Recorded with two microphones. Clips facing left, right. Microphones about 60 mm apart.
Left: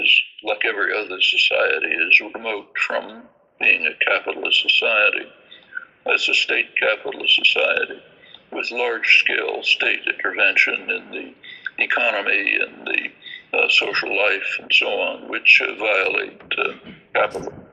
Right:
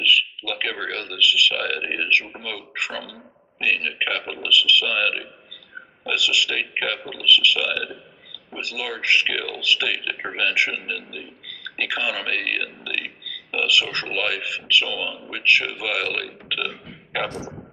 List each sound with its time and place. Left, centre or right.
0.0 s a sound: left
0.5 s a man's voice: left
16.9 s burping: left